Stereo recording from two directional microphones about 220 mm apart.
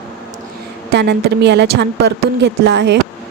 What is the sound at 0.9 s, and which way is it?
A woman's voice, 50° right (ahead or behind).